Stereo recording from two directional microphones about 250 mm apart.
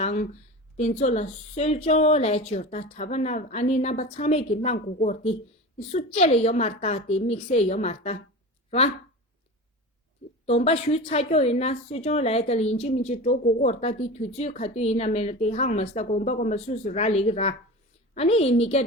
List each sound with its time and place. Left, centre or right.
0.0 s a woman's voice: left
10.4 s a woman's voice: left